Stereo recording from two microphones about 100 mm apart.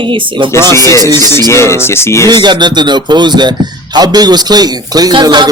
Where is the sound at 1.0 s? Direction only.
40° right (ahead or behind).